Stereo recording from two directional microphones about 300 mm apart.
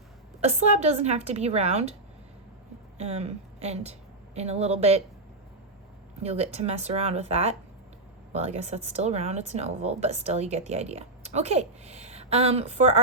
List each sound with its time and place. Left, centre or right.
0.4 s a woman's voice: right
3.0 s a woman's voice: right
6.2 s a woman's voice: right